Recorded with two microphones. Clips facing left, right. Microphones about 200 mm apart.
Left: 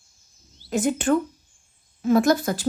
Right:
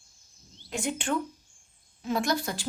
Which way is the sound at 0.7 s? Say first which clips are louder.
Left 9 dB; 45° left (ahead or behind).